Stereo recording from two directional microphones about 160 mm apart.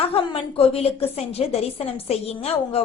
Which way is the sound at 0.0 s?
35° left (ahead or behind).